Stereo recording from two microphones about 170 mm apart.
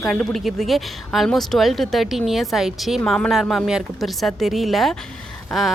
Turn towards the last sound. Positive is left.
turn(degrees=0)  # may be behind; listen again after turning